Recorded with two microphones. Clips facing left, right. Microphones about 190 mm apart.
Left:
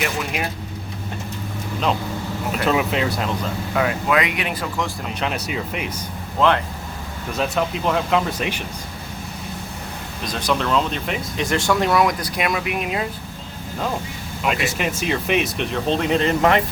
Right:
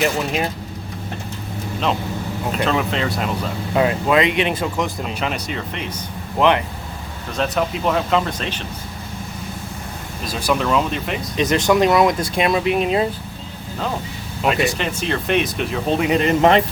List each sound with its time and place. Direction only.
0.0 s speech: 30° right (ahead or behind)
2.6 s speech: 5° left (ahead or behind)
3.8 s speech: 25° right (ahead or behind)
5.2 s speech: 5° left (ahead or behind)
6.4 s speech: 15° right (ahead or behind)
7.3 s speech: centre (ahead or behind)
10.2 s speech: 5° right (ahead or behind)
11.3 s speech: 20° right (ahead or behind)
14.4 s speech: 5° left (ahead or behind); by 16.5 s 15° right (ahead or behind)